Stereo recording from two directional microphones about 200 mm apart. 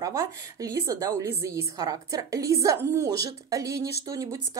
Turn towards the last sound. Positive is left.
turn(degrees=-15)  # may be behind; listen again after turning